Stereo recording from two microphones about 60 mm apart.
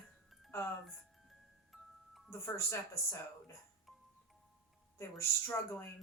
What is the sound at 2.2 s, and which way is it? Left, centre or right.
Speech, left.